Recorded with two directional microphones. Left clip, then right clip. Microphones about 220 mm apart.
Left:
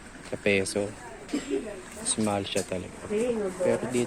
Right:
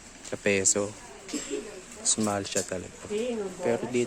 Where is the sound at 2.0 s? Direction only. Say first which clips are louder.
Even; 25° right (ahead or behind).